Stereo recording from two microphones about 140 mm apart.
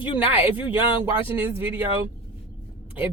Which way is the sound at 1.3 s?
15° right (ahead or behind).